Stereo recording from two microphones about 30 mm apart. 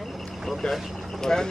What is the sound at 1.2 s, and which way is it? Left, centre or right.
Speech, centre.